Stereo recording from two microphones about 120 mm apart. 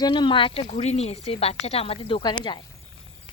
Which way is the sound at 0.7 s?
60° left (ahead or behind).